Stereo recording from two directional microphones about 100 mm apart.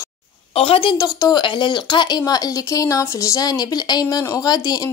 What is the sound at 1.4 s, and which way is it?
A woman's voice, 50° left (ahead or behind).